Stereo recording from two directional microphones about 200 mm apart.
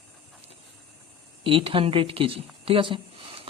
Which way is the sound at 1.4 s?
25° right (ahead or behind).